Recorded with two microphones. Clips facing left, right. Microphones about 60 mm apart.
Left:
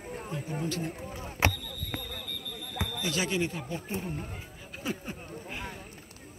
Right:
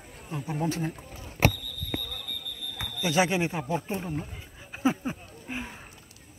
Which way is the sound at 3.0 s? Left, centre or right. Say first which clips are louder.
Right 6 dB; right.